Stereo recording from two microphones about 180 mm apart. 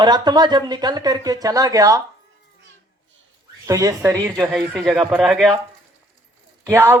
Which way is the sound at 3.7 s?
20° right (ahead or behind).